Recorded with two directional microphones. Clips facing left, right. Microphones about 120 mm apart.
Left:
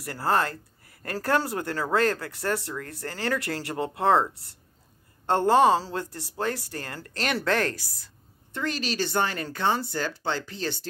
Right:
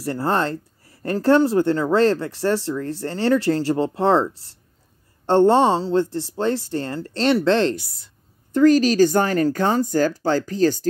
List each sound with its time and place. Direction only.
0.0 s speech: 30° right (ahead or behind)
8.5 s speech: 40° right (ahead or behind)